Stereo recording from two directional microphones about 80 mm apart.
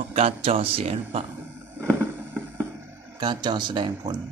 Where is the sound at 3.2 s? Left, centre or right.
Right.